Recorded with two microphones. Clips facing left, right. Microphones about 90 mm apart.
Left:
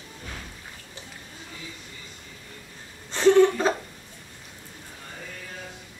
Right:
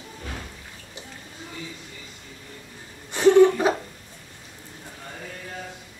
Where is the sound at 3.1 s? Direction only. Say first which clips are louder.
Right 2 dB; 15° right (ahead or behind).